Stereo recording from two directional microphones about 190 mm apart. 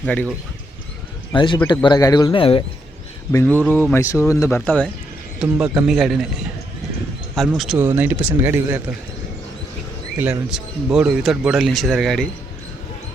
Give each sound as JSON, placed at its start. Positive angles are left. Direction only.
{"t": 0.0, "sound": "speech", "side_deg": 5}
{"t": 1.3, "sound": "speech", "side_deg": 25}
{"t": 3.7, "sound": "speech", "side_deg": 10}
{"t": 5.4, "sound": "speech", "side_deg": -10}
{"t": 7.3, "sound": "speech", "side_deg": 0}
{"t": 10.2, "sound": "speech", "side_deg": -10}